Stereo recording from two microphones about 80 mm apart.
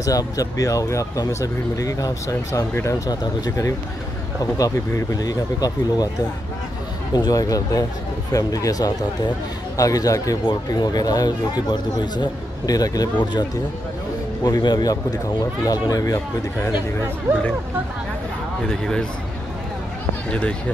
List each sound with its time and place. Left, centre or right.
0.0 s speech: left
2.7 s speech: left
3.1 s speech: left
7.2 s speech: left
12.6 s speech: left
15.6 s speech: left
18.7 s speech: centre
20.2 s speech: centre